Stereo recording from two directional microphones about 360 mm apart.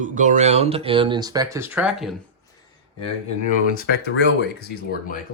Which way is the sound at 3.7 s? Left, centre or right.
Left.